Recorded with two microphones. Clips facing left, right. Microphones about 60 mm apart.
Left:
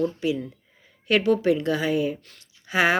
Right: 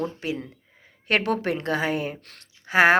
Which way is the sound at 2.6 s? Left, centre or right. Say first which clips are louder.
Right 4 dB; right.